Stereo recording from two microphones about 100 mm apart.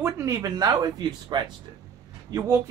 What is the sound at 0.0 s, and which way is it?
A man's voice, 30° right (ahead or behind).